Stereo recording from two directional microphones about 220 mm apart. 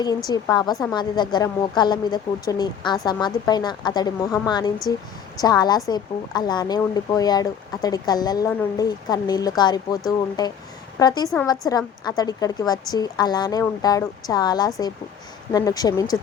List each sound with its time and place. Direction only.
0.3 s speech: 15° left (ahead or behind)